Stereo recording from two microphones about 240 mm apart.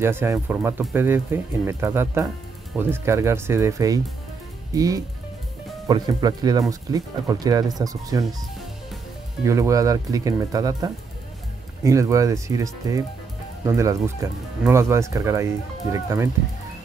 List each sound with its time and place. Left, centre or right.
0.0 s speech: centre
9.4 s speech: centre